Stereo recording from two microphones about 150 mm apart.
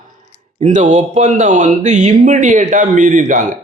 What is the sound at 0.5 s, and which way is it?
Speech, 55° right (ahead or behind).